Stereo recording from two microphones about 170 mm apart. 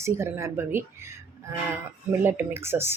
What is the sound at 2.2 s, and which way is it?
Speech, 15° right (ahead or behind).